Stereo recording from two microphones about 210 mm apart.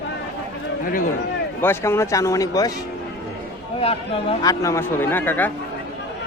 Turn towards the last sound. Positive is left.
turn(degrees=10)  # may be behind; listen again after turning